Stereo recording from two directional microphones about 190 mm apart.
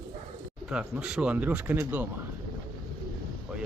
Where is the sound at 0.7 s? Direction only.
5° right (ahead or behind).